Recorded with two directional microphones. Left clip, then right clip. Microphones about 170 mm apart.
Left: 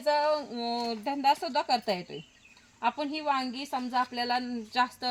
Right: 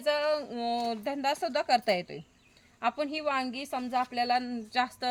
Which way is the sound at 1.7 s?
10° right (ahead or behind).